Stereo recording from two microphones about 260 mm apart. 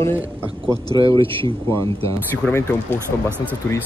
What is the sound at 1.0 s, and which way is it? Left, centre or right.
Speech, centre.